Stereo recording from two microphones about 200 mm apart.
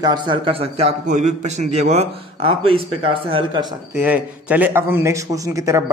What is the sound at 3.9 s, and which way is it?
A man's voice, 10° right (ahead or behind).